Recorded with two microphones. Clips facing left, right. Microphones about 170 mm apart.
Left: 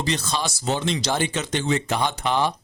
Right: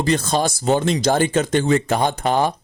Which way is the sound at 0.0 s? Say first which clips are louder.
Right 7 dB; 50° right (ahead or behind).